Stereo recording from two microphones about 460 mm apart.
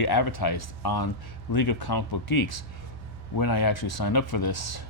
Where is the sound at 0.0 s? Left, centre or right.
Left.